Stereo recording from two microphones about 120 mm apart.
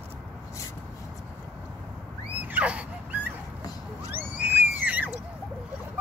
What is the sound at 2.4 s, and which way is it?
Dog, 10° right (ahead or behind).